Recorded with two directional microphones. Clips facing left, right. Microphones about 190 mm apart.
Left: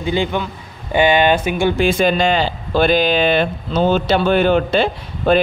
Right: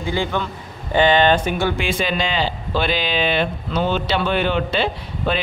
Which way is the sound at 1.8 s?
45° left (ahead or behind).